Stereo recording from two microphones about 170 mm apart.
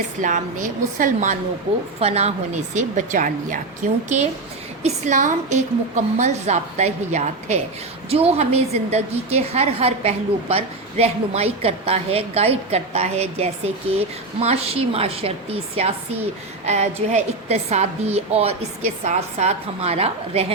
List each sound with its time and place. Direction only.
0.2 s a woman's voice: 45° right (ahead or behind)
2.0 s a woman's voice: 40° right (ahead or behind)
2.7 s a woman's voice: 50° right (ahead or behind)
4.8 s a woman's voice: 45° right (ahead or behind)